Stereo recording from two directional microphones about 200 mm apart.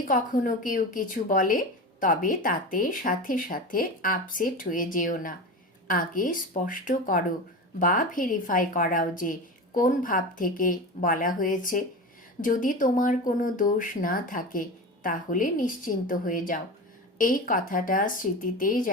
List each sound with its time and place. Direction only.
0.1 s speech: 40° left (ahead or behind)